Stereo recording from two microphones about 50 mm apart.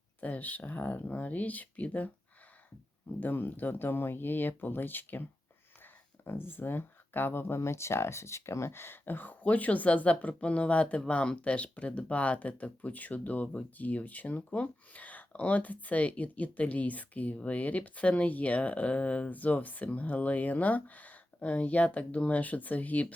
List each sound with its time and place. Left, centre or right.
0.2 s speech: left
3.2 s speech: left
6.2 s speech: left